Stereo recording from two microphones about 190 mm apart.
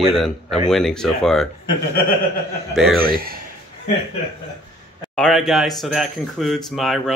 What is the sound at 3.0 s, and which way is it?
Speech, 50° right (ahead or behind).